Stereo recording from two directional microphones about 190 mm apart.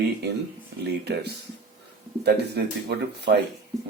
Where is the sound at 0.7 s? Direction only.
60° right (ahead or behind).